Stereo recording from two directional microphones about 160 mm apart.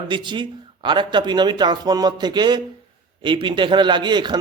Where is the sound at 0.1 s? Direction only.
30° right (ahead or behind).